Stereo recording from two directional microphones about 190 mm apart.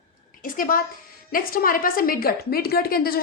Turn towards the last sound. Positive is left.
turn(degrees=50)  # may be behind; listen again after turning